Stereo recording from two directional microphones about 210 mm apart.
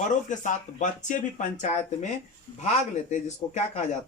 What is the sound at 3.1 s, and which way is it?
Speech, 35° left (ahead or behind).